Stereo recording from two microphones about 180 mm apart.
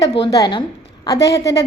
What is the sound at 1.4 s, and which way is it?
Speech, 70° left (ahead or behind).